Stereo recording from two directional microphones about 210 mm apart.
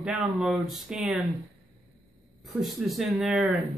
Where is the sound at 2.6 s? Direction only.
Centre (ahead or behind).